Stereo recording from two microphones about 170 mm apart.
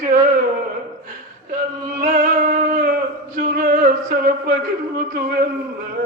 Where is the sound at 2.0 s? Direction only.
50° right (ahead or behind).